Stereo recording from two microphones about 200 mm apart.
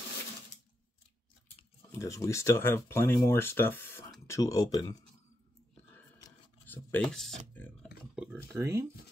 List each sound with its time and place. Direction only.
2.0 s speech: 15° left (ahead or behind)
6.2 s a sound: 10° left (ahead or behind)
8.5 s speech: 15° right (ahead or behind)